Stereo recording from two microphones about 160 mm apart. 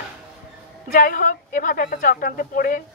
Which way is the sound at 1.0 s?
60° left (ahead or behind).